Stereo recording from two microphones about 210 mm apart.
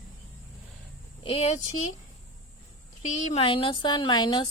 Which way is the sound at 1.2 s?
25° left (ahead or behind).